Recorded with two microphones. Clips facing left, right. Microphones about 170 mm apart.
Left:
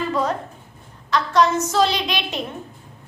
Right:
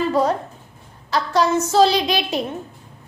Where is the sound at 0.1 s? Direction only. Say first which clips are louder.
Right 3 dB; 35° right (ahead or behind).